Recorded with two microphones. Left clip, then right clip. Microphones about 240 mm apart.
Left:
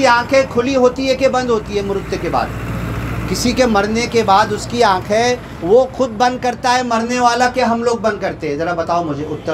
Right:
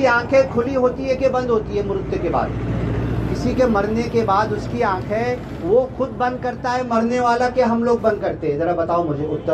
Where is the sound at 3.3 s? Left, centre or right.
Left.